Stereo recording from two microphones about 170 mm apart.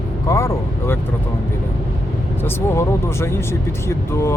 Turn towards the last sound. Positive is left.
turn(degrees=15)  # may be behind; listen again after turning